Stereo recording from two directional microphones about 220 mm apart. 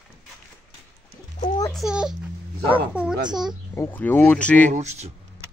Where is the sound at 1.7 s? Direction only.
5° right (ahead or behind).